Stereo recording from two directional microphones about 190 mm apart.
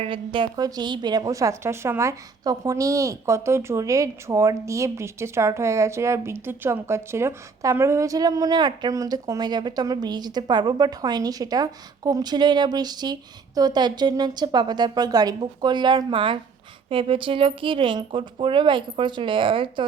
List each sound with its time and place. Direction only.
0.0 s a woman's voice: 25° right (ahead or behind)